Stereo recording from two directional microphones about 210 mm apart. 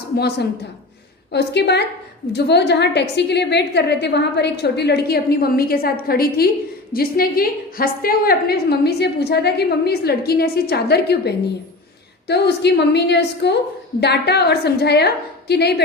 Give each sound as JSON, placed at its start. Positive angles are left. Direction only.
{"t": 0.2, "sound": "a woman's voice", "side_deg": 50}